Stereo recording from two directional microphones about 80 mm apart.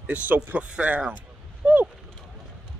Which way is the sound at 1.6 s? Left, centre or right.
Centre.